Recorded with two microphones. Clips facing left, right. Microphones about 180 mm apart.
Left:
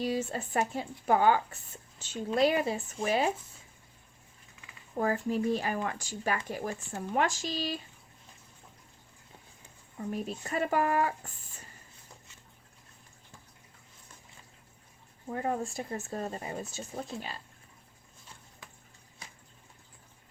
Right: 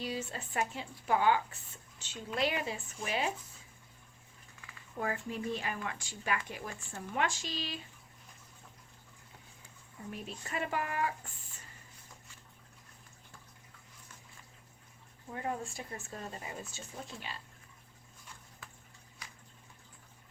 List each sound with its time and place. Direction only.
0.0 s speech: 40° left (ahead or behind)
4.9 s speech: 40° left (ahead or behind)
10.1 s speech: 40° left (ahead or behind)
15.3 s speech: 40° left (ahead or behind)